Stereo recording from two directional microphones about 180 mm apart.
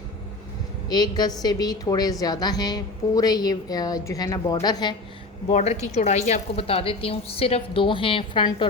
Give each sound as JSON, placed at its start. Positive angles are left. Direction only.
{"t": 0.9, "sound": "a woman's voice", "side_deg": 20}
{"t": 5.5, "sound": "a woman's voice", "side_deg": 40}